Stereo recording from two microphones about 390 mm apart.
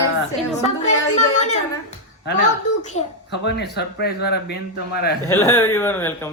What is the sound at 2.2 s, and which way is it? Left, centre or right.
A child's voice, left.